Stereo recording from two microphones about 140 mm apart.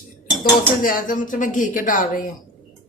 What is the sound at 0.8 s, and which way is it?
Speech, 80° left.